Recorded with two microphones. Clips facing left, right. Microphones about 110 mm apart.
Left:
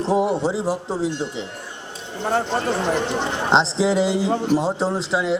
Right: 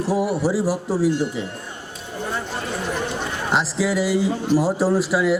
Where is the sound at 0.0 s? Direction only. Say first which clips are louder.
Left 1 dB; 20° left (ahead or behind).